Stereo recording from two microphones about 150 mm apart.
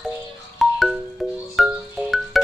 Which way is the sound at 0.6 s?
Centre (ahead or behind).